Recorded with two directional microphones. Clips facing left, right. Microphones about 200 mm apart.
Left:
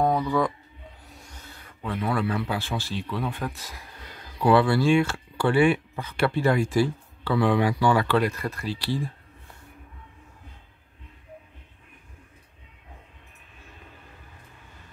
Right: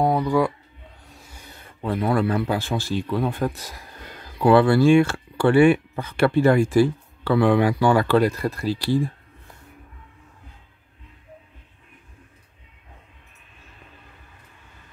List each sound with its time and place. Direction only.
0.0 s a sound: 10° right (ahead or behind)
1.0 s music: centre (ahead or behind)
1.4 s speech: 25° right (ahead or behind)